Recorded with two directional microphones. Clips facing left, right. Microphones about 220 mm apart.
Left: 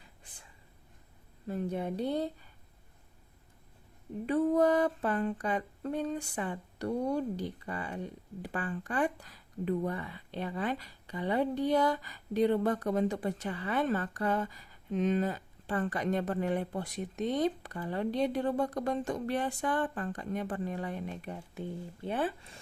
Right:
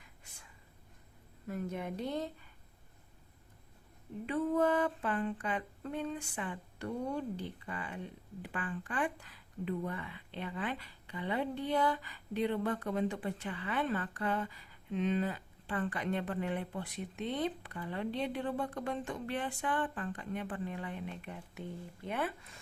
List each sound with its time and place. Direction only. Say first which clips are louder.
1.5 s mantra: left 5 dB; 30° left (ahead or behind)
4.3 s mantra: left 4 dB; 40° left (ahead or behind)
22.0 s mantra: left 4 dB; 30° left (ahead or behind)